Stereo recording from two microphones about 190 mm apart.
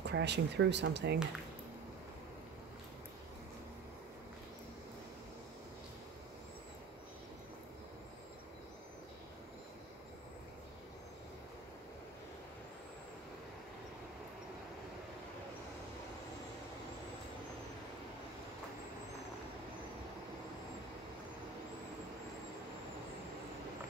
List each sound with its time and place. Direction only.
0.0 s speech: 65° right (ahead or behind)